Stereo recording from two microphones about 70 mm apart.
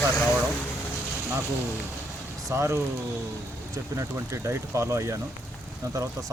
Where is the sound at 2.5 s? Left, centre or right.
Right.